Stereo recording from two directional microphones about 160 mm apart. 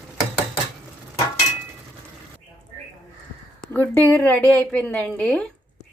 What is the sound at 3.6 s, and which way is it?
A woman's voice, 10° left (ahead or behind).